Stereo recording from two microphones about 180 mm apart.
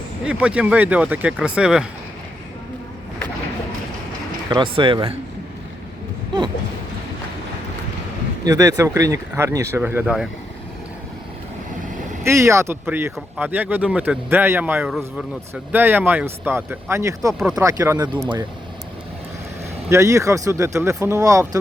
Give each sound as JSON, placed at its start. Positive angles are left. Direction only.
{"t": 0.3, "sound": "speech", "side_deg": -5}
{"t": 4.4, "sound": "speech", "side_deg": -25}
{"t": 8.4, "sound": "speech", "side_deg": -20}
{"t": 12.2, "sound": "speech", "side_deg": -15}
{"t": 17.3, "sound": "speech", "side_deg": -5}
{"t": 17.6, "sound": "speech", "side_deg": -15}
{"t": 19.9, "sound": "speech", "side_deg": -15}